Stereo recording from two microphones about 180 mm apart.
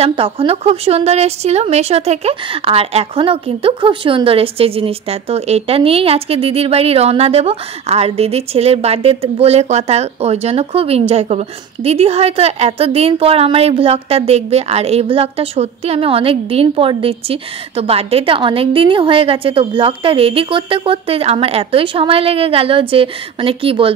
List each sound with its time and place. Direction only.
0.0 s a woman's voice: 30° right (ahead or behind)